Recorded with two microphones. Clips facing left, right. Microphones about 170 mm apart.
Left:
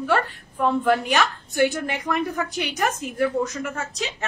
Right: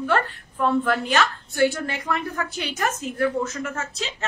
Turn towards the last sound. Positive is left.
turn(degrees=15)  # may be behind; listen again after turning